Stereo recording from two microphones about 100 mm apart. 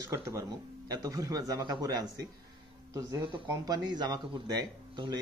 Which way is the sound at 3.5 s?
40° right (ahead or behind).